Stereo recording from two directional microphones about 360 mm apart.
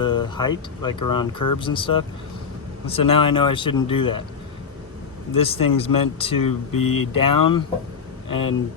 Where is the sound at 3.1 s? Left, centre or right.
Centre.